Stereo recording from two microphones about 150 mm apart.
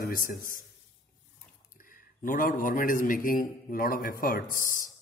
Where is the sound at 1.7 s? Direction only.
65° left (ahead or behind).